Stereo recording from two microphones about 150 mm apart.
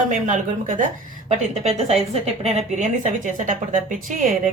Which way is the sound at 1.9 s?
45° right (ahead or behind).